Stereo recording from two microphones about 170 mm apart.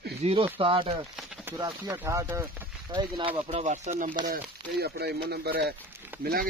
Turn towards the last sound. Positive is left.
turn(degrees=-65)  # may be behind; listen again after turning